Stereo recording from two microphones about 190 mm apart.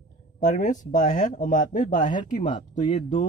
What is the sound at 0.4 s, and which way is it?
Speech, 45° left (ahead or behind).